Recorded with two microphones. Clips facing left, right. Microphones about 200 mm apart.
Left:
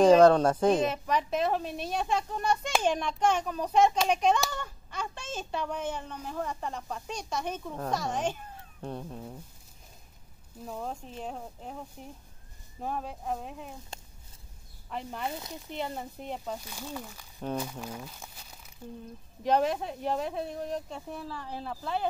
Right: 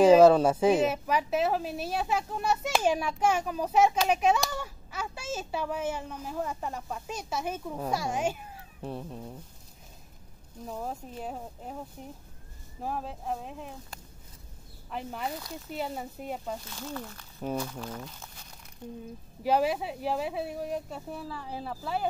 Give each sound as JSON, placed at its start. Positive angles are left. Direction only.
{"t": 0.0, "sound": "a woman's voice", "side_deg": -5}
{"t": 10.7, "sound": "speech", "side_deg": -5}
{"t": 12.8, "sound": "speech", "side_deg": 0}
{"t": 13.9, "sound": "a sound", "side_deg": 25}
{"t": 14.9, "sound": "speech", "side_deg": -5}
{"t": 16.6, "sound": "speech", "side_deg": 10}
{"t": 19.4, "sound": "a woman's voice", "side_deg": -5}